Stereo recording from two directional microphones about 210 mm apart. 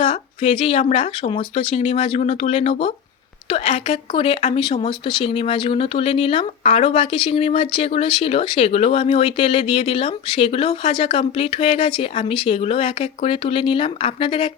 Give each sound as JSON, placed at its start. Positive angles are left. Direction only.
{"t": 0.0, "sound": "speech", "side_deg": 25}